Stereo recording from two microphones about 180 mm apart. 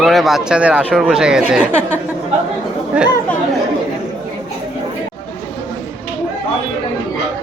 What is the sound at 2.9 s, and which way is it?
Speech, 5° right (ahead or behind).